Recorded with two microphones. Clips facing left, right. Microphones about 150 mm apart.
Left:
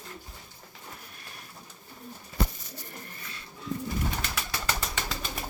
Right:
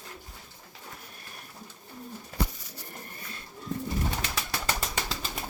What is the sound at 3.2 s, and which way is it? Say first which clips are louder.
Music: right 1 dB; 45° right (ahead or behind).